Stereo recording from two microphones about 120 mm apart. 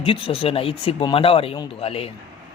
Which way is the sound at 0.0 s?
50° left (ahead or behind).